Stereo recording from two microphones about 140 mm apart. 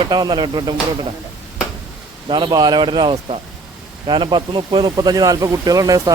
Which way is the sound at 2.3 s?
30° right (ahead or behind).